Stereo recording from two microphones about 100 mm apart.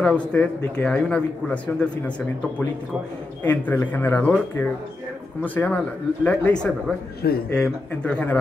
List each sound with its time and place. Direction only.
0.0 s speech: 15° left (ahead or behind)
3.4 s speech: 20° left (ahead or behind)